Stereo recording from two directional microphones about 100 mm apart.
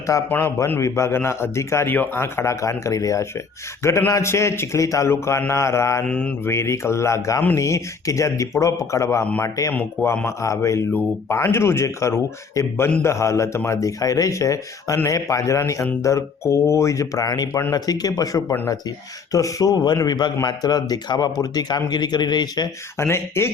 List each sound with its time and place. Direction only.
0.3 s a man's voice: 20° left (ahead or behind)
6.1 s mantra: 10° left (ahead or behind)
6.4 s a man's voice: 25° left (ahead or behind)
10.2 s a man's voice: 30° left (ahead or behind)
23.0 s a man's voice: 25° left (ahead or behind)